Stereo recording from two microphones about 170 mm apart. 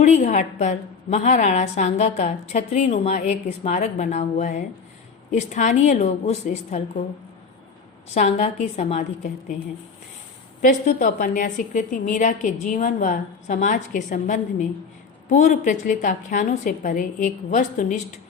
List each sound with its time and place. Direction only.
0.0 s a woman's voice: 45° left (ahead or behind)
8.1 s a woman's voice: 40° left (ahead or behind)
10.6 s a woman's voice: 50° left (ahead or behind)